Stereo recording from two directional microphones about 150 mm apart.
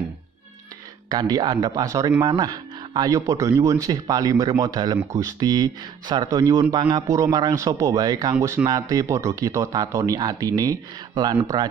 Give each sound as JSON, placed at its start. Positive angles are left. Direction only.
{"t": 1.0, "sound": "speech", "side_deg": -25}